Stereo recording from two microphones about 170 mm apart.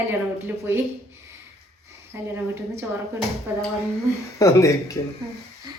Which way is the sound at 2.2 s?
15° right (ahead or behind).